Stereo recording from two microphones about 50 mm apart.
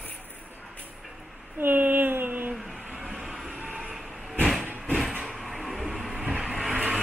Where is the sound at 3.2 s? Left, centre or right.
Centre.